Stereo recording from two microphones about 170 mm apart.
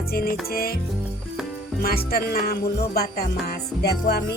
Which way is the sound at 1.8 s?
65° left (ahead or behind).